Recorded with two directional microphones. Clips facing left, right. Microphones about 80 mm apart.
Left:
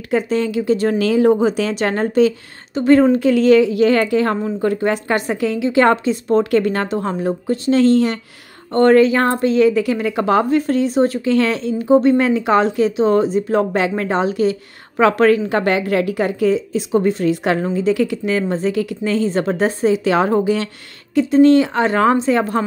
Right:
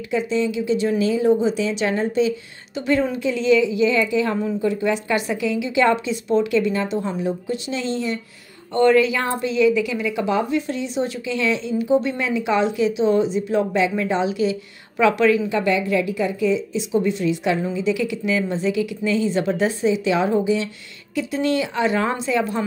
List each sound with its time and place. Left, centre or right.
0.1 s a woman's voice: left
1.0 s a woman's voice: left
2.7 s a woman's voice: left
8.7 s a woman's voice: left
21.1 s a woman's voice: left